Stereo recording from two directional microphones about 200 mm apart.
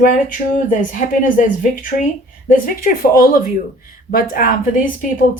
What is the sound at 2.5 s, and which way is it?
Speech, 45° left (ahead or behind).